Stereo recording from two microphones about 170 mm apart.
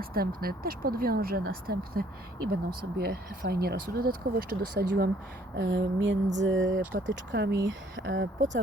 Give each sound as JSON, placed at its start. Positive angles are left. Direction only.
{"t": 0.0, "sound": "speech", "side_deg": -60}
{"t": 5.5, "sound": "speech", "side_deg": -90}